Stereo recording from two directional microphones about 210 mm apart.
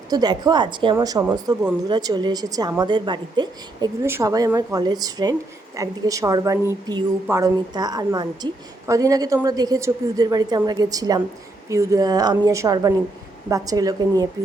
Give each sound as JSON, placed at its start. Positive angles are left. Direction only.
{"t": 0.1, "sound": "a woman's voice", "side_deg": -20}